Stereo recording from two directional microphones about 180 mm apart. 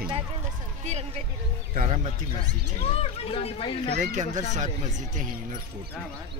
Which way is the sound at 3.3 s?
30° left (ahead or behind).